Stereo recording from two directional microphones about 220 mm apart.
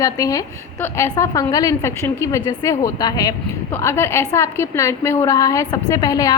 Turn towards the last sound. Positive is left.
turn(degrees=15)  # may be behind; listen again after turning